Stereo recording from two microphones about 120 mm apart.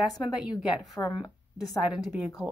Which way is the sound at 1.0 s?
15° left (ahead or behind).